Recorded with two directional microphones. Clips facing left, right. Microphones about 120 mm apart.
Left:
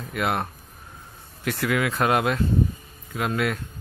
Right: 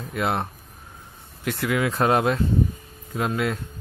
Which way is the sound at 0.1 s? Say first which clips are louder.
Right 1 dB; 25° right (ahead or behind).